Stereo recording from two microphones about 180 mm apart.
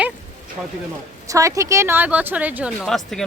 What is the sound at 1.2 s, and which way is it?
A woman's voice, 20° right (ahead or behind).